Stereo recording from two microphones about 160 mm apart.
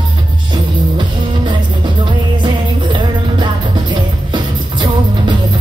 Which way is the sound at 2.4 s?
30° right (ahead or behind).